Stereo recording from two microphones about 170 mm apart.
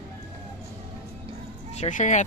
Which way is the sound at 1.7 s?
45° left (ahead or behind).